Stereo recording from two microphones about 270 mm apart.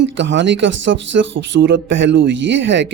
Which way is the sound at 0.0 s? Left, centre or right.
Right.